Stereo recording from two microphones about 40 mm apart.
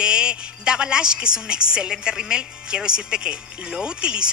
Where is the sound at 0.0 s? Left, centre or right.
Right.